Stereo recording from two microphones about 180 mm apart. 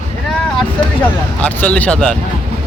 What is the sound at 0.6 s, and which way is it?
Speech, 10° left (ahead or behind).